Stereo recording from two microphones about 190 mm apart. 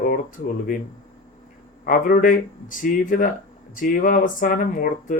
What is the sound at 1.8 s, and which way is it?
Speech, 45° left (ahead or behind).